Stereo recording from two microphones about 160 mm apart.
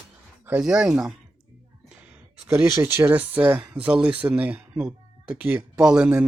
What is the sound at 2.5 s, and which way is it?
Speech, 20° right (ahead or behind).